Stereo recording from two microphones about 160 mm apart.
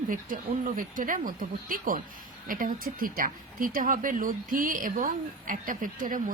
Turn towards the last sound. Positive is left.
turn(degrees=-60)  # may be behind; listen again after turning